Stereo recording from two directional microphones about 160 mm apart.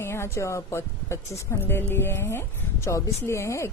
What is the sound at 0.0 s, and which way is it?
Speech, 15° left (ahead or behind).